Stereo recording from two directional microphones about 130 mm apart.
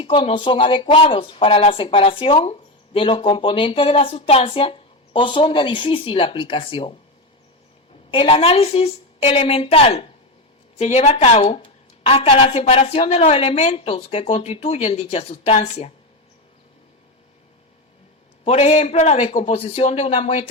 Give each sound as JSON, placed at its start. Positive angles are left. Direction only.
{"t": 0.0, "sound": "speech", "side_deg": 40}
{"t": 8.1, "sound": "speech", "side_deg": 45}
{"t": 18.4, "sound": "a man's voice", "side_deg": 55}